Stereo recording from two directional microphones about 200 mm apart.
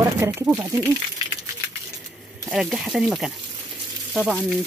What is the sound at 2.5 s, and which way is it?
Speech, centre (ahead or behind).